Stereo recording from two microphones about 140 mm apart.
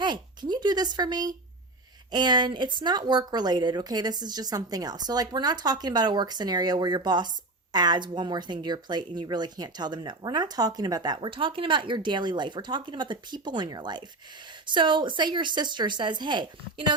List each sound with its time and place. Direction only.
0.0 s speech: 30° right (ahead or behind)